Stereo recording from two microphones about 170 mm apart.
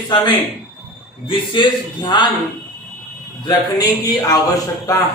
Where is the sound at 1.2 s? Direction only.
30° left (ahead or behind).